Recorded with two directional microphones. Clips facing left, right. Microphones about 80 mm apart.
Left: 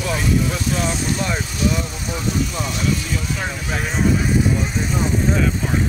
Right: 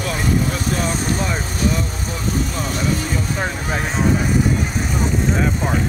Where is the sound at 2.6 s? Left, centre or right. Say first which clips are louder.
Right 1 dB; right.